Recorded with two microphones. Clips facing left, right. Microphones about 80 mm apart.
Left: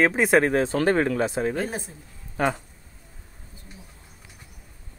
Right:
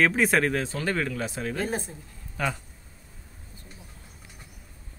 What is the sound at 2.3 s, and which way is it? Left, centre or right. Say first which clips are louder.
Speech: left 5 dB; left.